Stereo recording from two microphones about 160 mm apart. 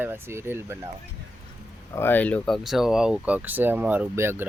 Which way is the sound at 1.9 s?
10° left (ahead or behind).